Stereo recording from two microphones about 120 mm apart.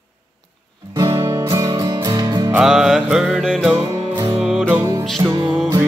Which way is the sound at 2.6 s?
Centre (ahead or behind).